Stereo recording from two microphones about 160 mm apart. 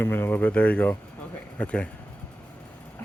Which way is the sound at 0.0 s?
15° left (ahead or behind).